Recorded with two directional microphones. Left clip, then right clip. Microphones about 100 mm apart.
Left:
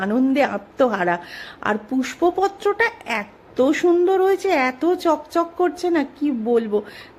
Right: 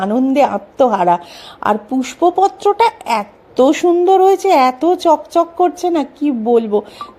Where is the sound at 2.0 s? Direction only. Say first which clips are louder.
Right 7 dB; 20° right (ahead or behind).